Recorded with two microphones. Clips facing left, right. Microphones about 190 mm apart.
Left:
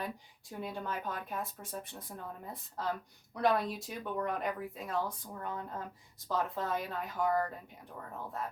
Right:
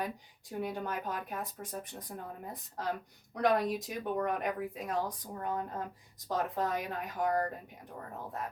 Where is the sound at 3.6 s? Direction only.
15° right (ahead or behind).